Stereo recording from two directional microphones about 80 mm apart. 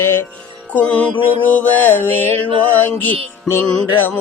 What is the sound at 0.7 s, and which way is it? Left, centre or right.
Music, centre.